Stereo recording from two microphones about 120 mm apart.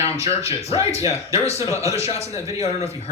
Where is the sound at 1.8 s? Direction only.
25° right (ahead or behind).